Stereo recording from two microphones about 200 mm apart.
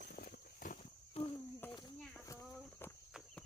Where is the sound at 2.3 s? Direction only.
10° left (ahead or behind).